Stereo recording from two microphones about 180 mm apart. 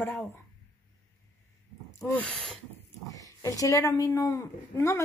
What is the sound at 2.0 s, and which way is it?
Speech, 5° left (ahead or behind).